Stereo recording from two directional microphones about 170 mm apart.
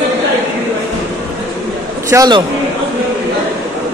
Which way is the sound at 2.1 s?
20° right (ahead or behind).